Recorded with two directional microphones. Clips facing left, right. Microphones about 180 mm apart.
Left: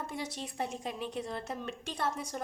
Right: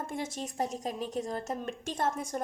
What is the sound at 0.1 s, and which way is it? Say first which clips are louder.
A woman's voice: right 3 dB; 45° right (ahead or behind).